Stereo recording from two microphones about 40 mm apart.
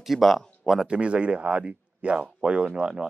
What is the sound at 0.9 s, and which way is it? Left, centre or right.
Speech, right.